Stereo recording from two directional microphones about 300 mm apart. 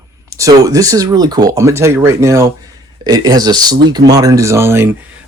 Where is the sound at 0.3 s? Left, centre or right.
Centre.